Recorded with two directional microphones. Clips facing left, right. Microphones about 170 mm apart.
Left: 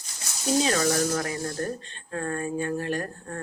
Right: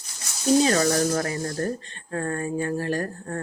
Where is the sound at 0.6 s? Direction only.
40° right (ahead or behind).